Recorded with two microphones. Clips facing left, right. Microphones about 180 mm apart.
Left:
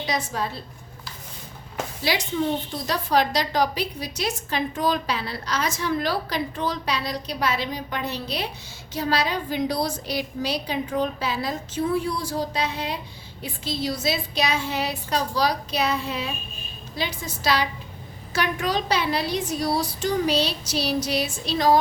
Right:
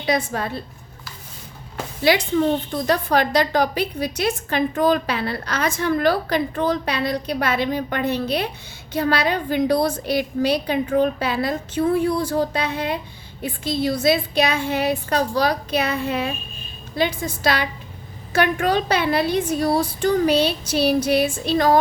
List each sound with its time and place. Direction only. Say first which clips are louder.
0.0 s a woman's voice: right 5 dB; 55° right (ahead or behind)
2.8 s a woman's voice: right 2 dB; 55° right (ahead or behind)